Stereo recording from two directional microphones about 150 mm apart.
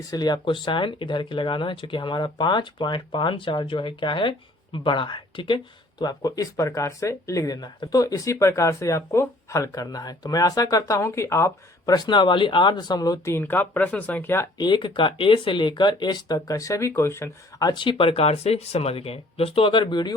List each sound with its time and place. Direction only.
0.1 s speech: 25° left (ahead or behind)
14.6 s speech: 30° left (ahead or behind)